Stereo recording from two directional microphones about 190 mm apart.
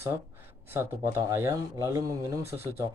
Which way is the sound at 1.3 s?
15° right (ahead or behind).